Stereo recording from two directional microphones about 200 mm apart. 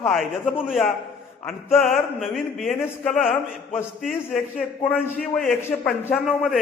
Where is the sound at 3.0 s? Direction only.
40° left (ahead or behind).